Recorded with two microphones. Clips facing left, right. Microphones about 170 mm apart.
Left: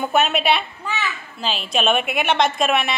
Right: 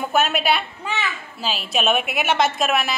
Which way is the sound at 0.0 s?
Centre (ahead or behind).